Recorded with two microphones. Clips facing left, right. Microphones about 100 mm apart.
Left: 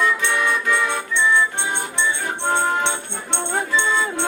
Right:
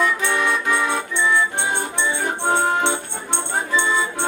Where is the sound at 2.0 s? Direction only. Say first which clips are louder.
Right 1 dB; 15° right (ahead or behind).